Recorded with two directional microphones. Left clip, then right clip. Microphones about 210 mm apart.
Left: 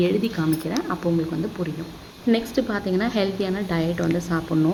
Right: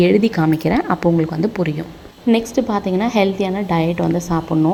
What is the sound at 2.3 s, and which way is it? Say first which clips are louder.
A woman's voice: right 5 dB; 20° right (ahead or behind).